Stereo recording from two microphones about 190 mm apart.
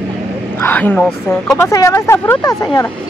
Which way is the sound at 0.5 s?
10° left (ahead or behind).